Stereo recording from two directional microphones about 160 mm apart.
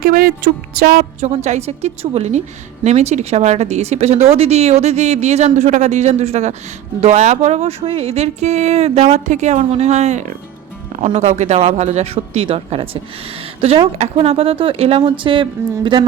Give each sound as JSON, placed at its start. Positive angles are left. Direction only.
{"t": 0.0, "sound": "a woman's voice", "side_deg": -70}
{"t": 0.9, "sound": "speech", "side_deg": -45}